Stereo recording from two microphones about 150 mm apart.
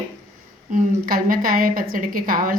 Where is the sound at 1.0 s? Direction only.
70° right (ahead or behind).